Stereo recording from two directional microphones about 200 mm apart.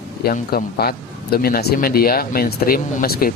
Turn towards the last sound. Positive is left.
turn(degrees=50)  # may be behind; listen again after turning